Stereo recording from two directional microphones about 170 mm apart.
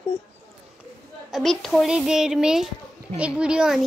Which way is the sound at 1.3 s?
Centre (ahead or behind).